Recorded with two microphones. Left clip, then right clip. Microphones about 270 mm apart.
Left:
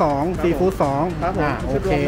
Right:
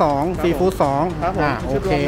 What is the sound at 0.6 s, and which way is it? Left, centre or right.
Speech, right.